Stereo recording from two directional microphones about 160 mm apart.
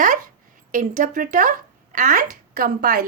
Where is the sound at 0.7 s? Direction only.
55° right (ahead or behind).